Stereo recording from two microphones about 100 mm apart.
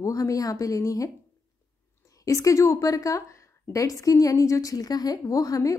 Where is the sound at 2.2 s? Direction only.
30° left (ahead or behind).